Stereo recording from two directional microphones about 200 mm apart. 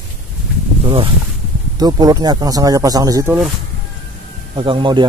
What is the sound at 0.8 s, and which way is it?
Speech, 25° right (ahead or behind).